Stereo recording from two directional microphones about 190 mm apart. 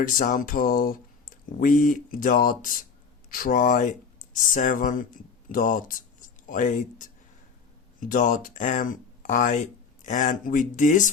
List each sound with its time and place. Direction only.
0.0 s speech: 45° left (ahead or behind)